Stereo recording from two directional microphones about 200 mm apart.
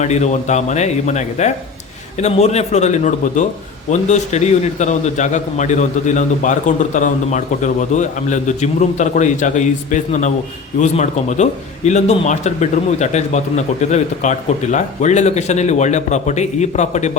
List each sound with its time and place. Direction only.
0.0 s a man's voice: 35° left (ahead or behind)